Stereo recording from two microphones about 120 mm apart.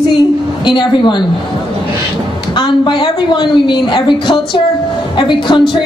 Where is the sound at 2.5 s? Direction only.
40° left (ahead or behind).